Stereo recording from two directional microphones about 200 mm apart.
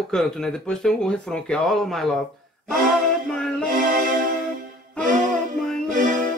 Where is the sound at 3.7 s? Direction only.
45° right (ahead or behind).